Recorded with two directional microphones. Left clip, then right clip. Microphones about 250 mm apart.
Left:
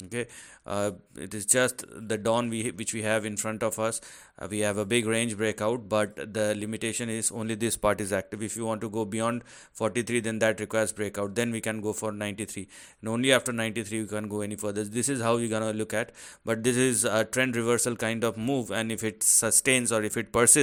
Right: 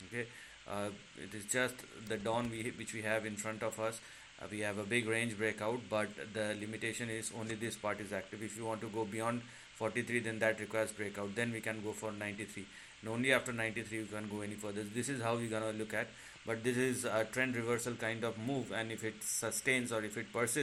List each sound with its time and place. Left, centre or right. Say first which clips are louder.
0.7 s speech: left 12 dB; left